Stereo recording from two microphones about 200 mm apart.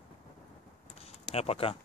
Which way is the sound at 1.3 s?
30° left (ahead or behind).